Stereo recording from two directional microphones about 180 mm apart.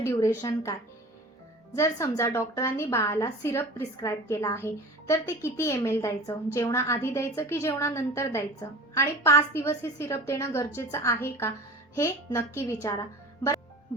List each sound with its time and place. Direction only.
0.0 s a woman's voice: 15° left (ahead or behind)